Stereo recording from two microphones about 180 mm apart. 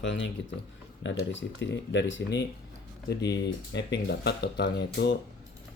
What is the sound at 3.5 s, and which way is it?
Speech, 75° left (ahead or behind).